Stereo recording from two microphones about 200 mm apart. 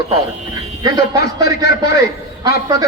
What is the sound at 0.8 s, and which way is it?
Speech, 20° right (ahead or behind).